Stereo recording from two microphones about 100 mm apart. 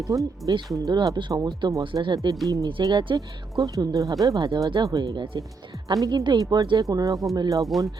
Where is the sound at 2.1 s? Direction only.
40° right (ahead or behind).